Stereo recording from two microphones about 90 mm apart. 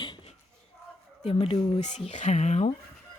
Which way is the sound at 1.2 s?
90° left.